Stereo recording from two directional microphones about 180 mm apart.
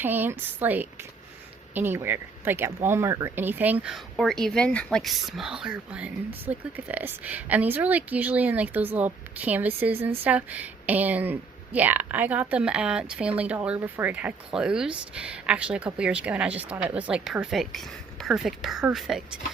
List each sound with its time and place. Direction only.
0.0 s a woman's voice: 10° right (ahead or behind)